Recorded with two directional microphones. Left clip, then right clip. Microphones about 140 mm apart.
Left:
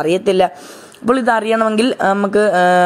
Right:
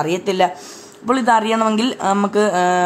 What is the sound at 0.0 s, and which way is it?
A woman's voice, 40° left (ahead or behind).